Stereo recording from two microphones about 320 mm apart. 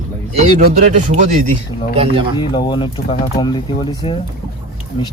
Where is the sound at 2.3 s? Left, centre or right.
Centre.